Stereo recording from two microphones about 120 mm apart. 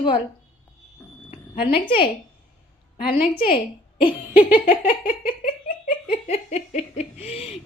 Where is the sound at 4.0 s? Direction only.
45° left (ahead or behind).